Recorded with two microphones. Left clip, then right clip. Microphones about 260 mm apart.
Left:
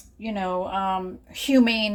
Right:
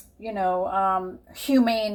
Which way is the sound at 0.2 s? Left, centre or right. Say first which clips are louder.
Right 3 dB; left.